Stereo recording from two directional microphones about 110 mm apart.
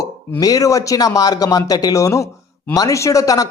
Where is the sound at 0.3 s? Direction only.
35° left (ahead or behind).